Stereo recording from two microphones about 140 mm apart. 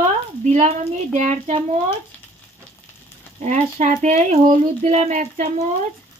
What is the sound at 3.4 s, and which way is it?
Speech, 55° right (ahead or behind).